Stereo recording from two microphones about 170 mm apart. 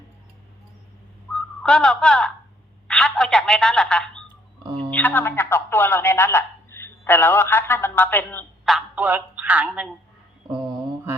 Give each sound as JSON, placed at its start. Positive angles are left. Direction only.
{"t": 1.3, "sound": "a woman's voice", "side_deg": 5}
{"t": 4.6, "sound": "speech", "side_deg": -30}
{"t": 4.9, "sound": "speech", "side_deg": 10}
{"t": 8.6, "sound": "speech", "side_deg": -5}
{"t": 10.5, "sound": "mantra", "side_deg": -20}